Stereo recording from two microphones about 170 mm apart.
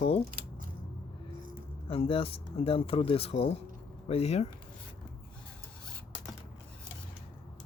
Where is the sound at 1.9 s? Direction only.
35° left (ahead or behind).